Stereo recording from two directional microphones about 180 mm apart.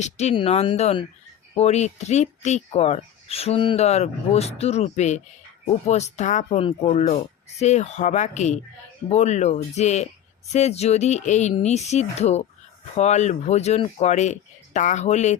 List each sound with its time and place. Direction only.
0.0 s speech: 40° left (ahead or behind)
6.6 s speech: 30° left (ahead or behind)